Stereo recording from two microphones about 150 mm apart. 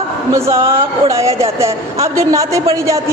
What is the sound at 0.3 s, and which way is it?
A woman's voice, 20° right (ahead or behind).